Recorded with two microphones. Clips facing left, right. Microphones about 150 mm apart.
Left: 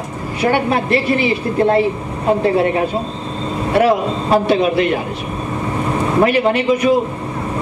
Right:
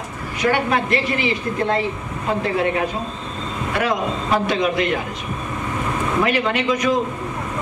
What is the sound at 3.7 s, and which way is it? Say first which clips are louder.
A man's voice: left 8 dB; 30° left (ahead or behind).